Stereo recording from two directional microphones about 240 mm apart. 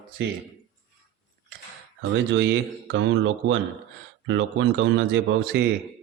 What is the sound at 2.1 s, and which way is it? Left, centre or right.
Speech, right.